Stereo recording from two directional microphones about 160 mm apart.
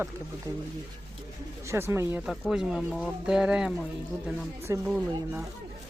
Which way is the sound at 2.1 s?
Centre (ahead or behind).